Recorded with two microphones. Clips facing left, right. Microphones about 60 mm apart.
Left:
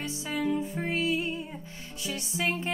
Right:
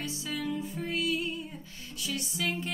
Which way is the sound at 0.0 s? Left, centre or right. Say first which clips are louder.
Left 4 dB; left.